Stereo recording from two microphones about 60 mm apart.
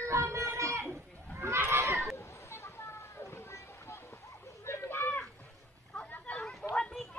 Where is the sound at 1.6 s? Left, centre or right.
Right.